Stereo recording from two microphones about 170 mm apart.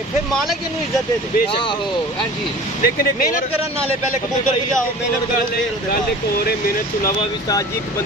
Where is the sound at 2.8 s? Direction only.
55° left (ahead or behind).